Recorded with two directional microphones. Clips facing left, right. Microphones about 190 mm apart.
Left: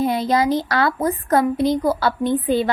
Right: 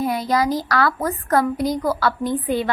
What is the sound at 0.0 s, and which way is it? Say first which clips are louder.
A woman's voice: left 2 dB; 25° left (ahead or behind).